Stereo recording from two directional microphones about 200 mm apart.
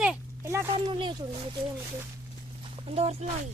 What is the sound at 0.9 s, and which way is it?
Speech, 25° right (ahead or behind).